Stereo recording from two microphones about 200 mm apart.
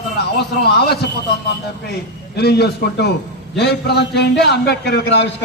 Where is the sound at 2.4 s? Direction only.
55° left (ahead or behind).